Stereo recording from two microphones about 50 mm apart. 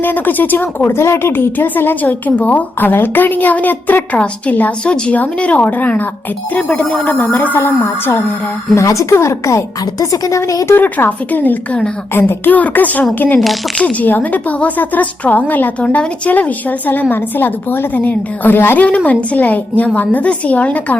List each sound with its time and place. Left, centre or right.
0.0 s a woman's voice: left
0.9 s a woman's voice: left
8.7 s speech: left
9.1 s a woman's voice: left
10.8 s a woman's voice: left
18.9 s a woman's voice: left